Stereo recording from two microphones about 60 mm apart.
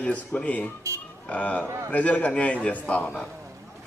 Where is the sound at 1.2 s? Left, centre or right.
Left.